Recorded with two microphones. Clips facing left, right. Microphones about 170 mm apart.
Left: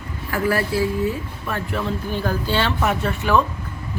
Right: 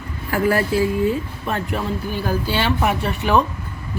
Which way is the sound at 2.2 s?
10° right (ahead or behind).